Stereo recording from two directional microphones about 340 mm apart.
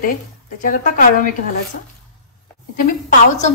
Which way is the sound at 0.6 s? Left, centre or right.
Left.